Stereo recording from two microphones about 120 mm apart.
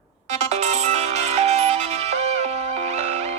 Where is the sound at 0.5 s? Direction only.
65° right (ahead or behind).